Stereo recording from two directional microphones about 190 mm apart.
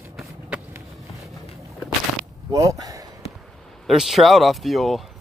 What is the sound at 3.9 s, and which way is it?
Speech, centre (ahead or behind).